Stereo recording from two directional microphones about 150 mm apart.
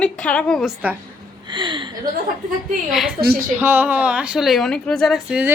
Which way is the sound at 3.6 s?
15° right (ahead or behind).